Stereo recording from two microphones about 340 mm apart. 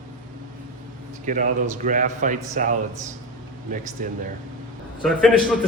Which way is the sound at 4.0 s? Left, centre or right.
Right.